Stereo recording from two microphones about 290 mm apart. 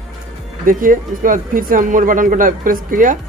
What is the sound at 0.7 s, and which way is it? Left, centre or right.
Speech, right.